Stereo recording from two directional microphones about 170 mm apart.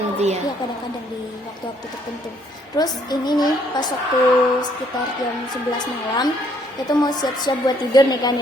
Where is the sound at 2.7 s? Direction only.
25° left (ahead or behind).